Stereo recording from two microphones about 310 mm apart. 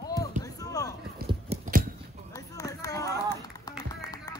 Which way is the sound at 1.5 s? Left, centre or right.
Centre.